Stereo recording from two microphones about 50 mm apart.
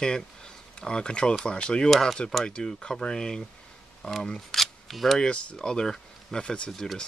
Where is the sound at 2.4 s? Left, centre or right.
Centre.